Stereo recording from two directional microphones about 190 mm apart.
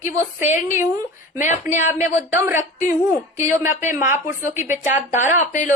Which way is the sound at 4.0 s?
40° left (ahead or behind).